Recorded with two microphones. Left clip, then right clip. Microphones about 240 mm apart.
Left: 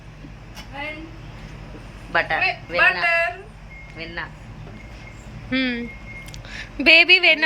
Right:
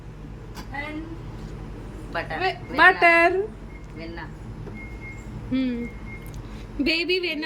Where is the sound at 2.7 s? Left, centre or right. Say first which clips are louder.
Right 3 dB; right.